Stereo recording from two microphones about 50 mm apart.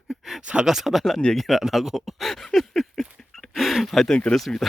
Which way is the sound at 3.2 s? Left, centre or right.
Centre.